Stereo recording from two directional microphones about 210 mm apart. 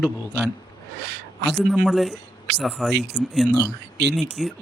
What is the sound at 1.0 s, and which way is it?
Speech, 55° right (ahead or behind).